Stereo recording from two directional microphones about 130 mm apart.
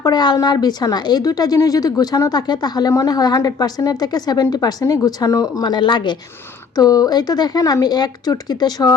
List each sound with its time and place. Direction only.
0.0 s a woman's voice: 35° left (ahead or behind)